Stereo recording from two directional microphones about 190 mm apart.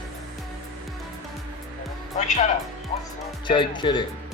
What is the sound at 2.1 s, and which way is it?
Speech, 40° left (ahead or behind).